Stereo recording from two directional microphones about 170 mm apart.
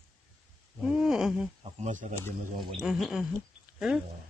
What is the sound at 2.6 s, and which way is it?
Speech, centre (ahead or behind).